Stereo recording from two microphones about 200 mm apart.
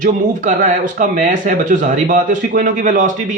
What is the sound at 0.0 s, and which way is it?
Speech, 40° right (ahead or behind).